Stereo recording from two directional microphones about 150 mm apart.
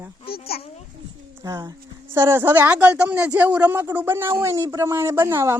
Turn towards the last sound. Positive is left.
turn(degrees=-15)  # may be behind; listen again after turning